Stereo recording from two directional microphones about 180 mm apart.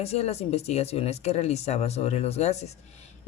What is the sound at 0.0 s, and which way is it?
A woman's voice, 35° left (ahead or behind).